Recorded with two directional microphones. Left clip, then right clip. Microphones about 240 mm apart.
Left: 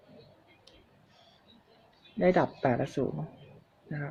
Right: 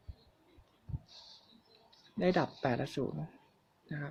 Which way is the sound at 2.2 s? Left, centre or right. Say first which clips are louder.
Left 6 dB; centre.